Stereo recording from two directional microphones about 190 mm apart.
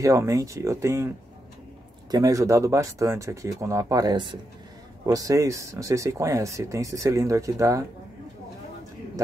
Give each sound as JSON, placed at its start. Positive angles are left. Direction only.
{"t": 0.0, "sound": "speech", "side_deg": -15}